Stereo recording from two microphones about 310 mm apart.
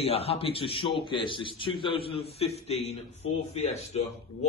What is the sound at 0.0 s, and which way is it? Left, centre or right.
A man's voice, centre.